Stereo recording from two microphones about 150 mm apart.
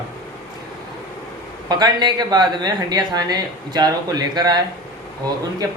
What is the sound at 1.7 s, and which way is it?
Speech, 30° right (ahead or behind).